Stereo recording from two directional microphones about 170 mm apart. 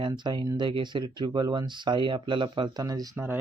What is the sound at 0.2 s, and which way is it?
Speech, 25° right (ahead or behind).